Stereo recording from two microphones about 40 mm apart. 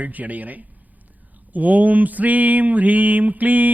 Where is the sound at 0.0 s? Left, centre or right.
Right.